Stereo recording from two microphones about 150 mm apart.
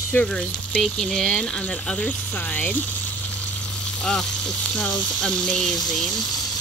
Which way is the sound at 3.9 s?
5° left (ahead or behind).